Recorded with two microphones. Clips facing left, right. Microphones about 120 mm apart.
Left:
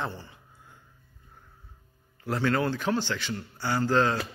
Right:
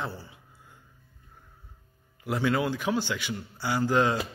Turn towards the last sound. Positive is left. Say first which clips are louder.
# even
turn(degrees=-15)  # may be behind; listen again after turning